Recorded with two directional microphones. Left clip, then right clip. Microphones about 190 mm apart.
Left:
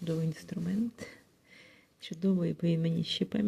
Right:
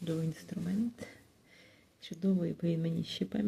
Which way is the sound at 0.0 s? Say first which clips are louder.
Left 2 dB; 15° left (ahead or behind).